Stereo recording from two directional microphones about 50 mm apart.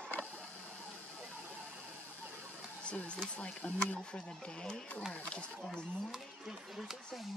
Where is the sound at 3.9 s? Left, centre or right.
Centre.